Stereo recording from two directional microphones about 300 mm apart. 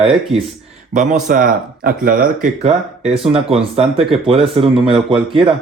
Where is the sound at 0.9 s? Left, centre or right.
Right.